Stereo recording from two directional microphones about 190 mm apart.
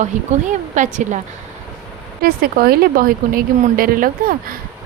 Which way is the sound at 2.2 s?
50° right (ahead or behind).